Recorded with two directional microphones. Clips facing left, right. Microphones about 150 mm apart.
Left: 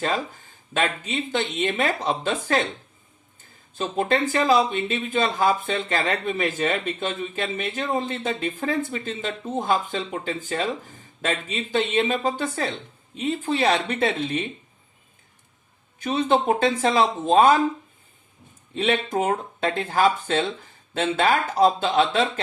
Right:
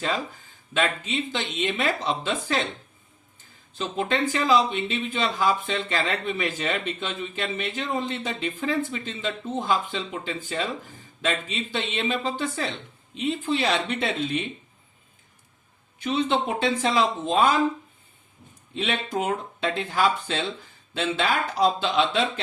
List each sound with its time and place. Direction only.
0.7 s speech: 45° left (ahead or behind)
3.8 s speech: 45° left (ahead or behind)
16.0 s speech: 45° left (ahead or behind)
18.7 s speech: 45° left (ahead or behind)